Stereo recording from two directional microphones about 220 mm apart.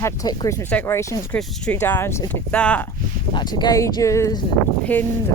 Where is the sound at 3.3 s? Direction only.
20° left (ahead or behind).